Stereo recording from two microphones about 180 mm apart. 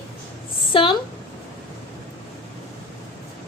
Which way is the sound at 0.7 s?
30° left (ahead or behind).